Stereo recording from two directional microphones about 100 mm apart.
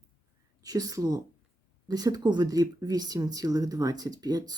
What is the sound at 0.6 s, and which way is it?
A woman's voice, 40° right (ahead or behind).